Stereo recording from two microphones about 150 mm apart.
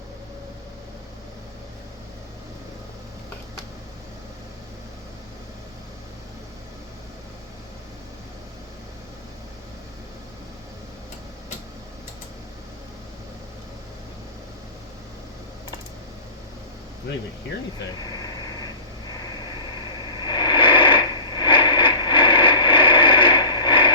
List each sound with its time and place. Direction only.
20.2 s radio: 30° left (ahead or behind)